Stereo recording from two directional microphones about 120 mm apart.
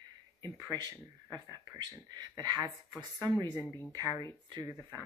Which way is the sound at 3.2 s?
25° right (ahead or behind).